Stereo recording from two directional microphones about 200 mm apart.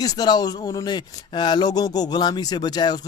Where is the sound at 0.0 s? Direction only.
20° left (ahead or behind).